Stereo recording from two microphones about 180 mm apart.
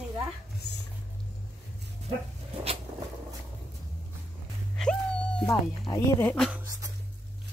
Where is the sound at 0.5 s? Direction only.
70° left (ahead or behind).